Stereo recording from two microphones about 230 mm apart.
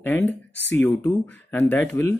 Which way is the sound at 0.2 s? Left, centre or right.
Left.